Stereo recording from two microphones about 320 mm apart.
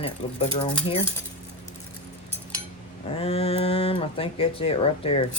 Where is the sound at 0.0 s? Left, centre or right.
Centre.